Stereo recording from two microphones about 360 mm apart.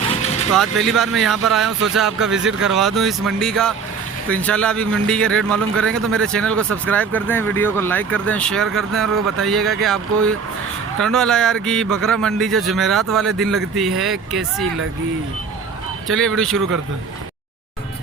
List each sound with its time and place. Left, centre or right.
0.0 s vehicle: centre
0.5 s a man's voice: centre
16.0 s a man's voice: centre